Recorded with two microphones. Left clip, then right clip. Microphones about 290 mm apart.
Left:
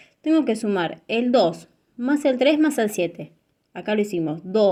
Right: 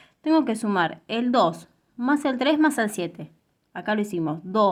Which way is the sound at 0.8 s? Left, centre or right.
Centre.